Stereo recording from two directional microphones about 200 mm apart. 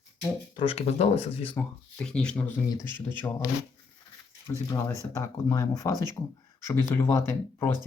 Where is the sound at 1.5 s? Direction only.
5° left (ahead or behind).